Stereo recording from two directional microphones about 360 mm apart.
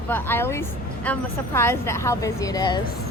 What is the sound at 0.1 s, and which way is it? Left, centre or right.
A woman's voice, centre.